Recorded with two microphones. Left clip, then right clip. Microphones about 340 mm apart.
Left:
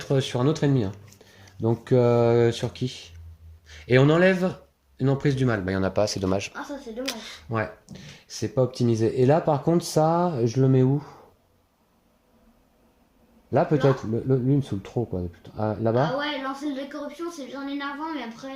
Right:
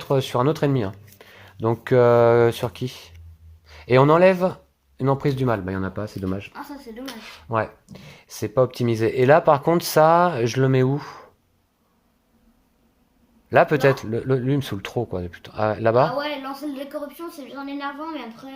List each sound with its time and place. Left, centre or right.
0.0 s speech: centre
7.0 s speech: centre
7.9 s speech: centre
13.5 s speech: right
14.9 s speech: right
15.3 s speech: right
16.1 s speech: centre